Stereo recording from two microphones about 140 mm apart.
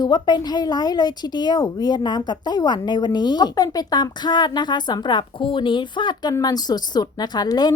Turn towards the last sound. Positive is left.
turn(degrees=30)  # may be behind; listen again after turning